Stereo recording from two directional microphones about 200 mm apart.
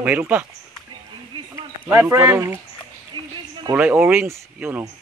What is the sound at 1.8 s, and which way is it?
Speech, 10° right (ahead or behind).